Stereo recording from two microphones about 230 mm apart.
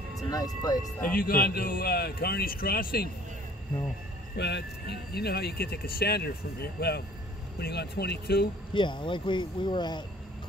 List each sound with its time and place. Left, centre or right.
0.3 s speech: centre
1.0 s speech: left
4.4 s speech: left
8.7 s speech: left